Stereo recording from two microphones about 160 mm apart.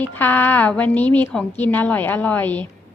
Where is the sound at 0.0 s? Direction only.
10° left (ahead or behind).